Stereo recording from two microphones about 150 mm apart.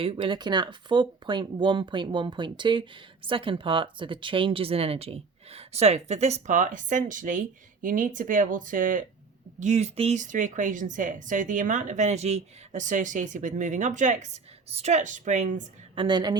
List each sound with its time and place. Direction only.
0.0 s speech: 35° right (ahead or behind); by 9.0 s 60° right (ahead or behind)
9.6 s a woman's voice: 50° right (ahead or behind)
16.0 s speech: 30° right (ahead or behind)